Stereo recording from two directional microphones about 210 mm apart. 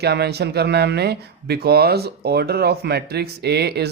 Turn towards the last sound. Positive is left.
turn(degrees=-50)  # may be behind; listen again after turning